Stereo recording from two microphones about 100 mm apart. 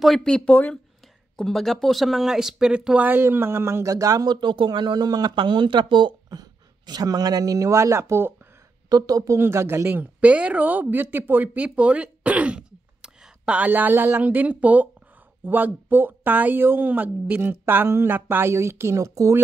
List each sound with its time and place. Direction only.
0.0 s speech: 5° left (ahead or behind)
3.1 s a woman's voice: 25° right (ahead or behind)
4.4 s speech: 55° right (ahead or behind); by 8.4 s 25° right (ahead or behind)
8.8 s speech: 40° right (ahead or behind)
9.4 s a woman's voice: 25° right (ahead or behind)